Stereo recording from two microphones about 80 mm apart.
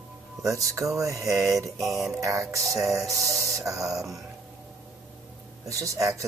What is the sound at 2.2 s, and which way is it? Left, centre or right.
Speech, right.